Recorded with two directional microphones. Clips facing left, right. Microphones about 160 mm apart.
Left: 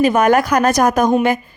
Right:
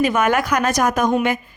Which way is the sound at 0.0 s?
35° left (ahead or behind).